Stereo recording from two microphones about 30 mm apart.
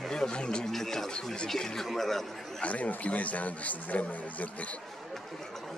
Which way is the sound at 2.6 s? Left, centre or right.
Left.